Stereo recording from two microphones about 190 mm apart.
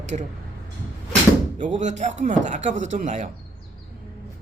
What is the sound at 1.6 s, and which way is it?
Speech, 40° right (ahead or behind).